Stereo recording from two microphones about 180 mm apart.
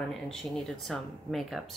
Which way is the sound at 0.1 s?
Centre (ahead or behind).